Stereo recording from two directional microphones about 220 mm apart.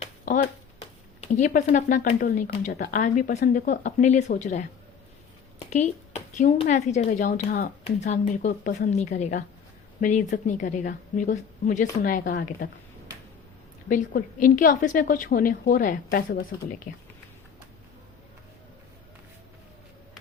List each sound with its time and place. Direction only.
0.0 s speech: 35° left (ahead or behind)
13.8 s speech: 40° left (ahead or behind)